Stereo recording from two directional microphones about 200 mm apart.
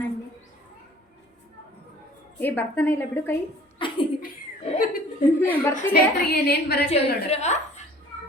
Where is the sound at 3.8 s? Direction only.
25° left (ahead or behind).